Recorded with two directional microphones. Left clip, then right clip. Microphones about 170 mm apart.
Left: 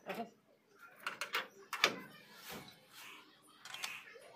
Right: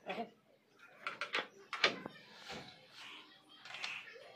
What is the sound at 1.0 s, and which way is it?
Bird, 40° left (ahead or behind).